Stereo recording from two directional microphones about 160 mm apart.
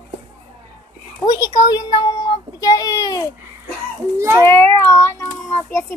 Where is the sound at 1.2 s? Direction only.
25° left (ahead or behind).